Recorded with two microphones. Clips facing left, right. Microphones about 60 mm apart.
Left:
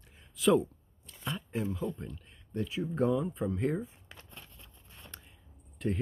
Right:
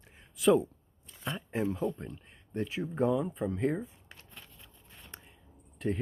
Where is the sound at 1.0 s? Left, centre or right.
Centre.